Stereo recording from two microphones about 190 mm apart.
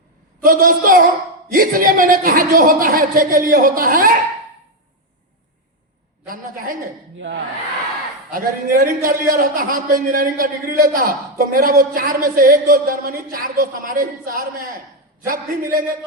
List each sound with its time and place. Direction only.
0.4 s a man's voice: 50° right (ahead or behind)
6.2 s a man's voice: 50° right (ahead or behind)
7.2 s hair dryer: 75° right (ahead or behind)
8.3 s a man's voice: 50° right (ahead or behind)